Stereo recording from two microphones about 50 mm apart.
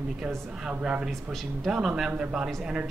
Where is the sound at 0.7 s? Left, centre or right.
Right.